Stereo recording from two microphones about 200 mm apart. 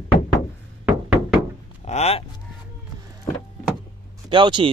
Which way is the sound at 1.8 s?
35° left (ahead or behind).